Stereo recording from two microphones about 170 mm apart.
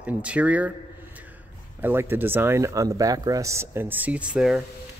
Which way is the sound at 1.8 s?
15° right (ahead or behind).